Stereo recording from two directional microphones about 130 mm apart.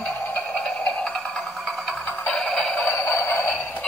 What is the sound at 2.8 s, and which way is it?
Music, 20° left (ahead or behind).